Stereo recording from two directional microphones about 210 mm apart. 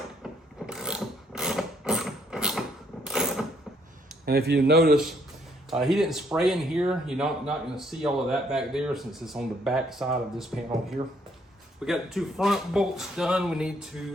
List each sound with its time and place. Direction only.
0.7 s mechanisms: 5° right (ahead or behind)
4.3 s speech: 50° right (ahead or behind)
5.7 s speech: centre (ahead or behind)
11.9 s speech: centre (ahead or behind)